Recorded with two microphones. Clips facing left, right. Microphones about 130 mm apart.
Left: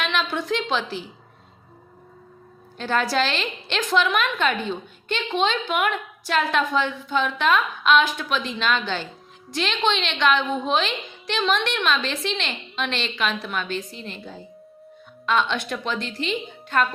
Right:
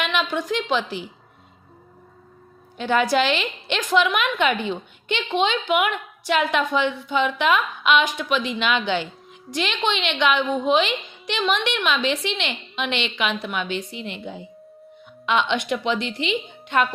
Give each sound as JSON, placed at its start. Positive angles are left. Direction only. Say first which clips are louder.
{"t": 0.1, "sound": "a woman's voice", "louder": "right 1 dB", "side_deg": -15}
{"t": 2.7, "sound": "a woman's voice", "louder": "right 3 dB", "side_deg": -15}
{"t": 15.3, "sound": "a woman's voice", "louder": "right 1 dB", "side_deg": -15}